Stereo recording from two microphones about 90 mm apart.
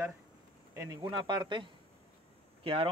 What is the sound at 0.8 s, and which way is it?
Speech, 40° right (ahead or behind).